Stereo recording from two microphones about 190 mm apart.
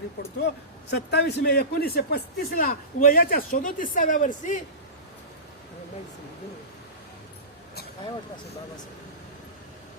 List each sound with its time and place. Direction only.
0.3 s a man's voice: 60° left (ahead or behind); by 4.6 s 40° left (ahead or behind)